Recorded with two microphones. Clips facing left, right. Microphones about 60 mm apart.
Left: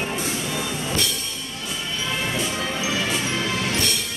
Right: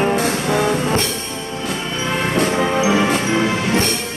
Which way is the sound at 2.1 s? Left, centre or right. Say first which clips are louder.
Right 9 dB; right.